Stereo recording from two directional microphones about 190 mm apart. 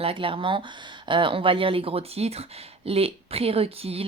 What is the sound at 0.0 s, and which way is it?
Speech, 30° right (ahead or behind).